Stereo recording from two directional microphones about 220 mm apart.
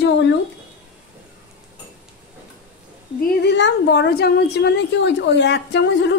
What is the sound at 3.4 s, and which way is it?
A woman's voice, 55° left (ahead or behind).